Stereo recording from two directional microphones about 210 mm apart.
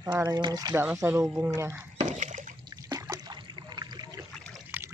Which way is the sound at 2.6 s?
15° right (ahead or behind).